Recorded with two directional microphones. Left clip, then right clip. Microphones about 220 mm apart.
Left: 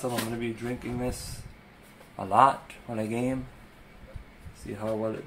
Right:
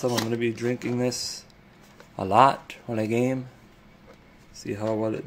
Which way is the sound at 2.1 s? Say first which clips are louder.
Right 3 dB; 50° right (ahead or behind).